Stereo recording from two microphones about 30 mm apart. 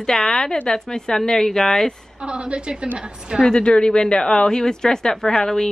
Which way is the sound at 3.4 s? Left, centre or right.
Left.